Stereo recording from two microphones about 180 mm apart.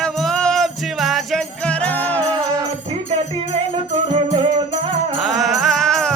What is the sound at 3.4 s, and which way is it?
Music, 30° right (ahead or behind).